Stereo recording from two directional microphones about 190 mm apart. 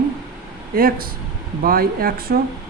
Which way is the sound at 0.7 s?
50° right (ahead or behind).